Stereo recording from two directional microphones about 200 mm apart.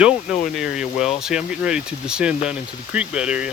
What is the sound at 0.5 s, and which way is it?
Speech, 5° right (ahead or behind).